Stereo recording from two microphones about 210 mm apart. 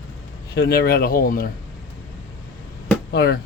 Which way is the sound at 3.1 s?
50° left (ahead or behind).